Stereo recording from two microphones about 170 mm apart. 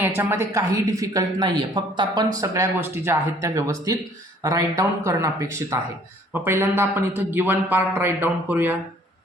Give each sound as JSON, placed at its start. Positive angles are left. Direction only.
{"t": 0.0, "sound": "a man's voice", "side_deg": -15}